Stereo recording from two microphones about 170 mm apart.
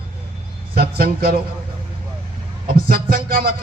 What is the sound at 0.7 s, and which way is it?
Speech, 65° right (ahead or behind).